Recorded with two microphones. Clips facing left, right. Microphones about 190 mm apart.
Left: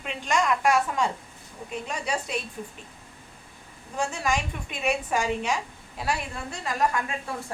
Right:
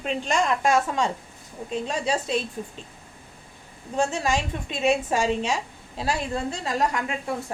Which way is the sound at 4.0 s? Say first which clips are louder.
Right 3 dB; 25° right (ahead or behind).